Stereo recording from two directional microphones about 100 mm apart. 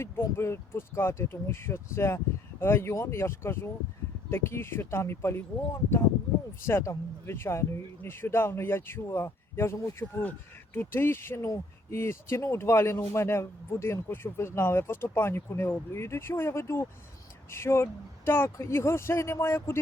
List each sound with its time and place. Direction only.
0.0 s speech: 25° left (ahead or behind)
6.7 s speech: 25° left (ahead or behind)